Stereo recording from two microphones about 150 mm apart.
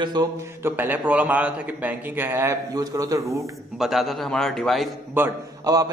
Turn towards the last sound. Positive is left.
turn(degrees=-25)  # may be behind; listen again after turning